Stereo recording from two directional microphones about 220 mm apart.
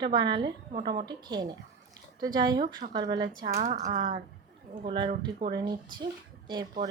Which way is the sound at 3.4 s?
30° right (ahead or behind).